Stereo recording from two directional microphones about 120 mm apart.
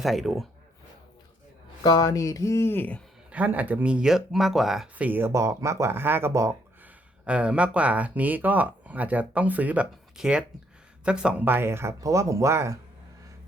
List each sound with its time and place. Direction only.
0.0 s speech: centre (ahead or behind)
1.8 s speech: 30° left (ahead or behind); by 3.0 s 15° left (ahead or behind)
3.3 s speech: 15° right (ahead or behind)
7.3 s speech: 10° right (ahead or behind)